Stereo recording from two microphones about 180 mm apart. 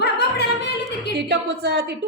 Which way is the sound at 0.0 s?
65° left (ahead or behind).